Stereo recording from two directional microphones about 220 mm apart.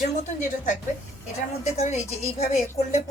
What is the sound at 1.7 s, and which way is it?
Speech, 30° left (ahead or behind).